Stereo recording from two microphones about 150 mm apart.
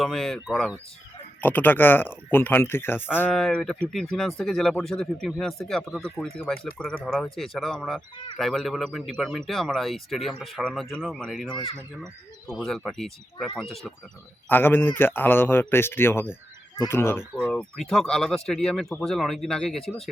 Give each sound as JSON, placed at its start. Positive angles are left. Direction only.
{"t": 0.0, "sound": "speech", "side_deg": 5}
{"t": 11.4, "sound": "speech", "side_deg": 35}
{"t": 12.5, "sound": "speech", "side_deg": 0}
{"t": 14.5, "sound": "a man's voice", "side_deg": 15}
{"t": 17.5, "sound": "speech", "side_deg": 5}